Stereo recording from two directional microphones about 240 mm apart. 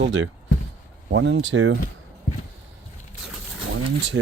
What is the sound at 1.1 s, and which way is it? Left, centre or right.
Speech, right.